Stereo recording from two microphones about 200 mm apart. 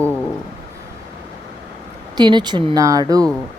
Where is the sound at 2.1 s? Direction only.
20° right (ahead or behind).